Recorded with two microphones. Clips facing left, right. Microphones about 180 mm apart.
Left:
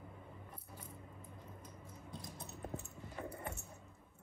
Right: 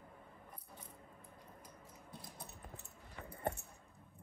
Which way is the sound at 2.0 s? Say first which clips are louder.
Left 4 dB; 5° right (ahead or behind).